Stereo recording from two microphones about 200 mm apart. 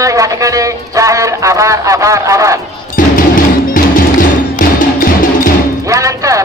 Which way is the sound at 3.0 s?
45° left (ahead or behind).